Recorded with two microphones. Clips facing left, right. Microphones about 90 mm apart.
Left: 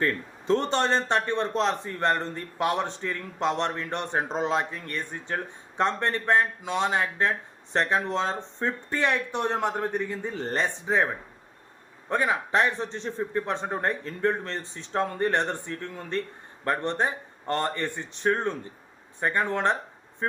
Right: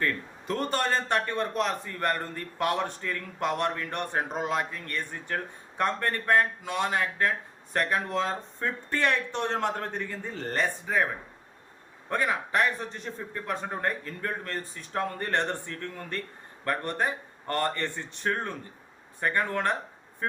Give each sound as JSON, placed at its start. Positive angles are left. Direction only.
{"t": 0.0, "sound": "speech", "side_deg": 25}